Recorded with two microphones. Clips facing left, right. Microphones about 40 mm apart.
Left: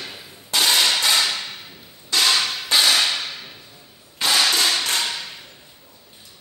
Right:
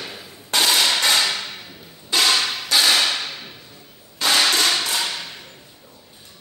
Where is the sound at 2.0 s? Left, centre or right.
Centre.